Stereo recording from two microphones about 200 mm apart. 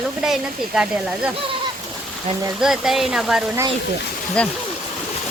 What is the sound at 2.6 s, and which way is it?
Speech, centre (ahead or behind).